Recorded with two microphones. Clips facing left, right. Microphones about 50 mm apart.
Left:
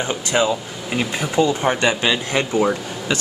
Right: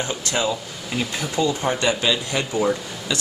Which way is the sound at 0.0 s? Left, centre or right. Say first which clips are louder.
Left 4 dB; left.